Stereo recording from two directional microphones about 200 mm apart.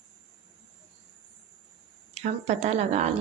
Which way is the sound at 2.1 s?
35° right (ahead or behind).